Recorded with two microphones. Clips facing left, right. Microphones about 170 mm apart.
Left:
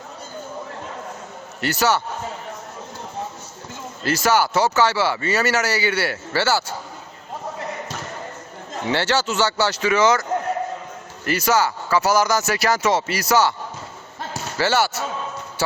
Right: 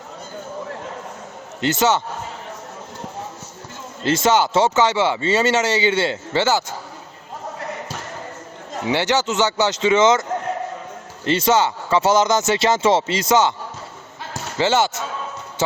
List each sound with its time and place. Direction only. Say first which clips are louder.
1.6 s speech: right 2 dB; 20° right (ahead or behind)
4.0 s speech: right 2 dB; 25° right (ahead or behind)
8.9 s speech: right 2 dB; 15° right (ahead or behind)
11.3 s speech: right 2 dB; 25° right (ahead or behind)
14.6 s speech: right 2 dB; 20° right (ahead or behind)